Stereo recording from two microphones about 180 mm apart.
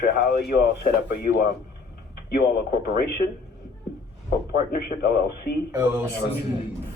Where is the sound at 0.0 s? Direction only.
65° left (ahead or behind).